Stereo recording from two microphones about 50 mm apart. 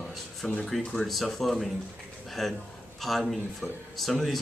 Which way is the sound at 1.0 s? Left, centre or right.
Centre.